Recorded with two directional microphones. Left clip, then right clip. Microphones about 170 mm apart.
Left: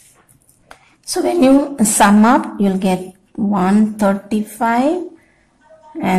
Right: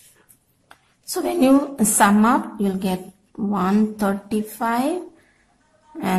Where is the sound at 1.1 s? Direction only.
5° left (ahead or behind).